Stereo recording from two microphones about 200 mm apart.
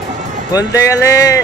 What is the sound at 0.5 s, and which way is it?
Speech, 15° left (ahead or behind).